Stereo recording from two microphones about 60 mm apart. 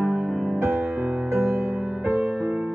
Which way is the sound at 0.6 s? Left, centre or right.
Right.